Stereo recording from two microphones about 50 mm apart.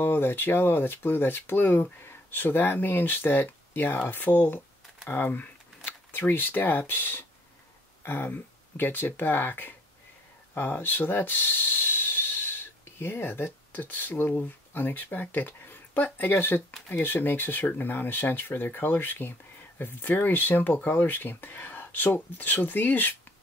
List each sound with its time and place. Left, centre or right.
0.0 s speech: left